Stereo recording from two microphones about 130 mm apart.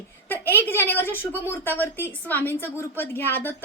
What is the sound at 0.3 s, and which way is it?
A woman's voice, 15° left (ahead or behind).